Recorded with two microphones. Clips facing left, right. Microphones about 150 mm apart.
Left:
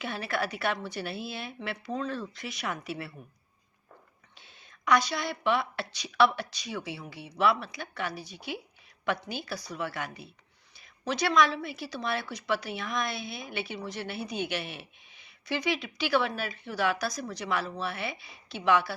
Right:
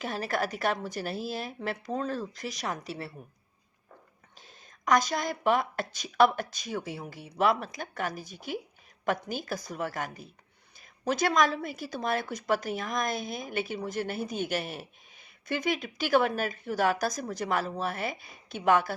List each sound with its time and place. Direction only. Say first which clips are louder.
0.0 s a woman's voice: right 2 dB; 40° right (ahead or behind)
4.4 s a woman's voice: right 3 dB; 40° right (ahead or behind)